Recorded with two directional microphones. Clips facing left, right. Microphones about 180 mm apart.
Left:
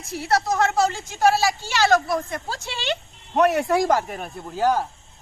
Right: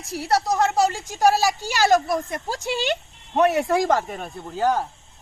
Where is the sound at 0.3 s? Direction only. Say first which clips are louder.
Even; 15° right (ahead or behind).